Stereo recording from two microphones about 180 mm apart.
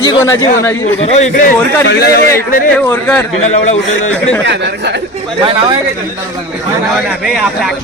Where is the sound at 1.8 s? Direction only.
65° left (ahead or behind).